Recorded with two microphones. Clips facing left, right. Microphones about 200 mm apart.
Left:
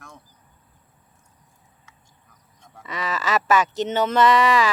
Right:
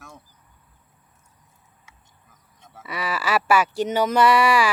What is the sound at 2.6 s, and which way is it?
Speech, 5° right (ahead or behind).